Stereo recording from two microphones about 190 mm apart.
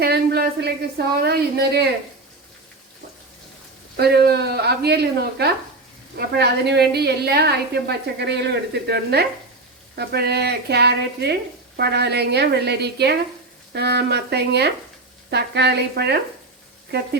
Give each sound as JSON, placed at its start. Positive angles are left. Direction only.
{"t": 0.0, "sound": "a woman's voice", "side_deg": -55}
{"t": 3.9, "sound": "a woman's voice", "side_deg": -60}